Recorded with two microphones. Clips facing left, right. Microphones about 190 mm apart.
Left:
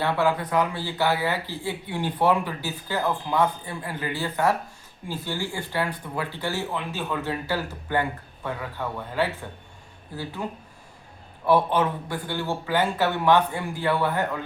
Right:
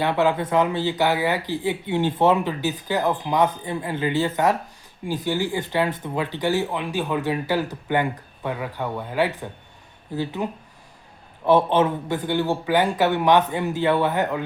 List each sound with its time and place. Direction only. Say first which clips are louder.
0.0 s speech: right 3 dB; 20° right (ahead or behind)
10.4 s speech: right 4 dB; 20° right (ahead or behind)